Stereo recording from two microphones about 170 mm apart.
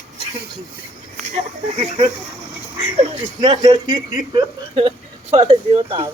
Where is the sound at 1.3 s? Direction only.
40° right (ahead or behind).